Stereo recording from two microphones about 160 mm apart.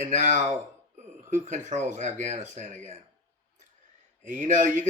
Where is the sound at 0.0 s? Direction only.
50° right (ahead or behind).